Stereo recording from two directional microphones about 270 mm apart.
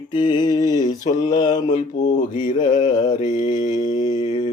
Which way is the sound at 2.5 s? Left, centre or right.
Centre.